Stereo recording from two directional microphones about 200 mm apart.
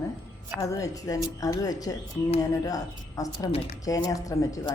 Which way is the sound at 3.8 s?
15° left (ahead or behind).